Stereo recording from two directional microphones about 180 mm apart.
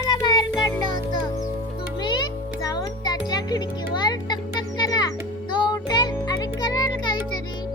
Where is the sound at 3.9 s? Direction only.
25° left (ahead or behind).